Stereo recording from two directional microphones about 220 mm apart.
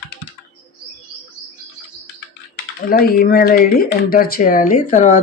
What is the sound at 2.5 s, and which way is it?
Speech, 45° left (ahead or behind).